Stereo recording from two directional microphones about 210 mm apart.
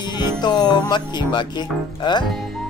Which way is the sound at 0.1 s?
20° left (ahead or behind).